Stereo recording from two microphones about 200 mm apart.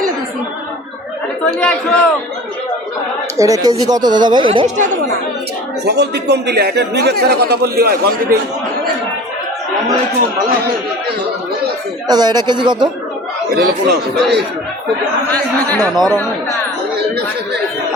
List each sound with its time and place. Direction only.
1.5 s a man's voice: 5° left (ahead or behind)
3.3 s speech: 15° right (ahead or behind)
5.8 s speech: 55° right (ahead or behind)
12.0 s speech: 20° right (ahead or behind)
13.5 s speech: 55° right (ahead or behind)
15.3 s speech: 10° left (ahead or behind)